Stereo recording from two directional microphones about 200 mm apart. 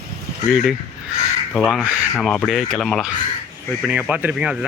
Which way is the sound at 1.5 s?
Centre (ahead or behind).